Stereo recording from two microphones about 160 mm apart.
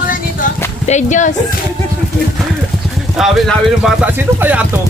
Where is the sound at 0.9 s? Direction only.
50° left (ahead or behind).